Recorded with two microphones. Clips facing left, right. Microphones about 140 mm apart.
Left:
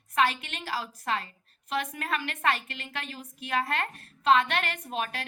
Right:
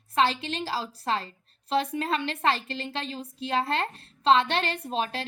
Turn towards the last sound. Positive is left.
turn(degrees=-30)  # may be behind; listen again after turning